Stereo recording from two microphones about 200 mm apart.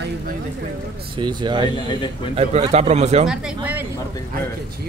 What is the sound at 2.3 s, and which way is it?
Speech, 30° right (ahead or behind).